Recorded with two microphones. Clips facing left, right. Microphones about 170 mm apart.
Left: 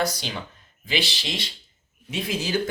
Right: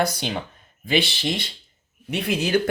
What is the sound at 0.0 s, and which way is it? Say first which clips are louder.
Speech: right 3 dB; 55° right (ahead or behind).